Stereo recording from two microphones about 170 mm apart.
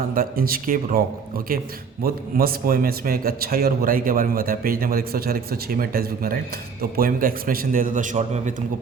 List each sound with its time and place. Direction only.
0.1 s a man's voice: 55° right (ahead or behind)
2.0 s a man's voice: 60° right (ahead or behind); by 8.5 s 45° right (ahead or behind)